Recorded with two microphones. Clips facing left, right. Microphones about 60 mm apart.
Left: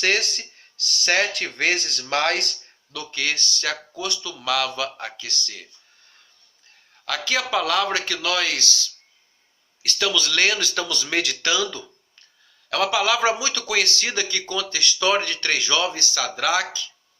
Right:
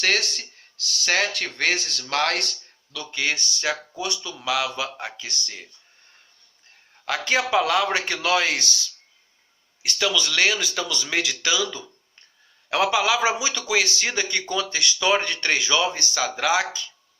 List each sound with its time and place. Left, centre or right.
0.0 s speech: centre
3.1 s speech: centre
7.0 s speech: right
8.0 s speech: right
9.8 s speech: centre
12.6 s a man's voice: centre
16.0 s a man's voice: right